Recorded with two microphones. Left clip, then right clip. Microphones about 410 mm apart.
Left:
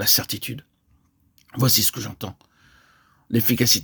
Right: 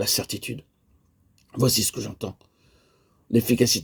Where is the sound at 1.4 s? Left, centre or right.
Left.